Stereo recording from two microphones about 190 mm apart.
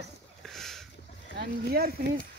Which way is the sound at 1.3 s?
55° right (ahead or behind).